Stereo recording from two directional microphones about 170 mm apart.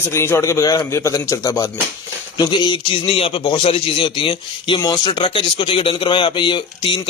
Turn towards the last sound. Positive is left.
turn(degrees=30)  # may be behind; listen again after turning